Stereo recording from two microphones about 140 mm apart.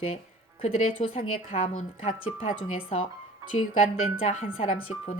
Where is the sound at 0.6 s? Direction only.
50° left (ahead or behind).